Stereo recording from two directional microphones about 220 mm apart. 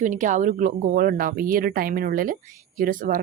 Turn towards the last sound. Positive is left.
turn(degrees=-40)  # may be behind; listen again after turning